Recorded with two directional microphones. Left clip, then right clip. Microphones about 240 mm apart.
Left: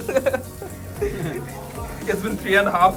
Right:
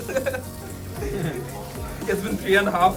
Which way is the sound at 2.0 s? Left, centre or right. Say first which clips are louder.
Left 1 dB; centre.